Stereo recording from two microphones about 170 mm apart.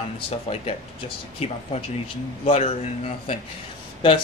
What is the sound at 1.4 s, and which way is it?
Speech, 35° left (ahead or behind).